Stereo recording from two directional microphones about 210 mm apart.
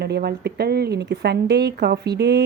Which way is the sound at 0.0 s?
50° right (ahead or behind).